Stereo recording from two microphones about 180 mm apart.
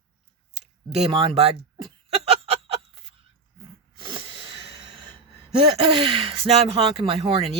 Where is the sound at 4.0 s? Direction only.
30° right (ahead or behind).